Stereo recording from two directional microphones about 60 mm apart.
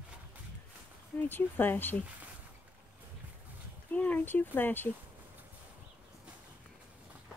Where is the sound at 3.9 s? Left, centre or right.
Left.